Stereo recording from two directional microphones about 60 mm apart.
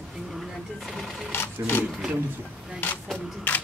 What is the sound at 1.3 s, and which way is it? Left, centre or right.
Speech, left.